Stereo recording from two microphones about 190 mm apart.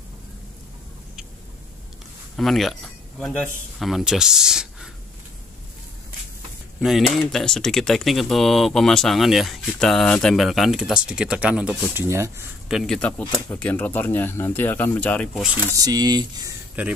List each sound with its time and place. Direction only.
2.3 s speech: centre (ahead or behind)
6.8 s speech: centre (ahead or behind)
12.6 s speech: centre (ahead or behind)
15.7 s speech: 20° right (ahead or behind)
16.8 s speech: 5° right (ahead or behind)